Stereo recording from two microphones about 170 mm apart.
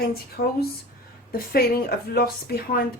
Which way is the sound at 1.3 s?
65° left (ahead or behind).